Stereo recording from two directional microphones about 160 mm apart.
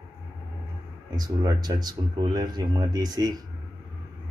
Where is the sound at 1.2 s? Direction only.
25° right (ahead or behind).